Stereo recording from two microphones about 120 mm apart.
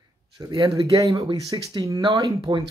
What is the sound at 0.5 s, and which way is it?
Speech, 40° right (ahead or behind).